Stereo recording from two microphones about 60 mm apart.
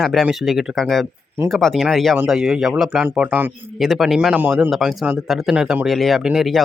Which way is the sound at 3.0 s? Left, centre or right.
Right.